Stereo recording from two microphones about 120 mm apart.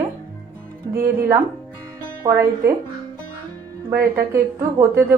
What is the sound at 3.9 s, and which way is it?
A woman's voice, 20° right (ahead or behind).